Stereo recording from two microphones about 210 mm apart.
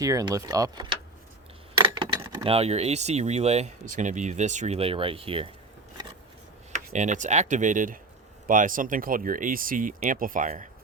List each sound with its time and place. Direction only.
0.0 s speech: 15° right (ahead or behind)
6.7 s speech: 35° right (ahead or behind)